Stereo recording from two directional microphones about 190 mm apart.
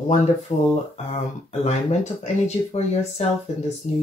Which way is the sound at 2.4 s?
35° left (ahead or behind).